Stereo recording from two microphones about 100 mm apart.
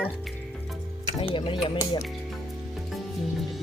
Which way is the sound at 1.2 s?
60° left (ahead or behind).